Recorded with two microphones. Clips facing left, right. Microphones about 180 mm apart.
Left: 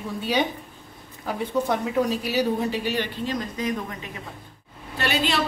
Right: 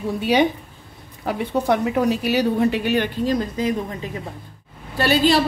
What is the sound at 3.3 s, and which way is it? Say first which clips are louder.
Speech: right 6 dB; 35° right (ahead or behind).